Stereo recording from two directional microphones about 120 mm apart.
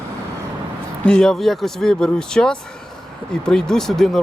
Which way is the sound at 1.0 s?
5° left (ahead or behind).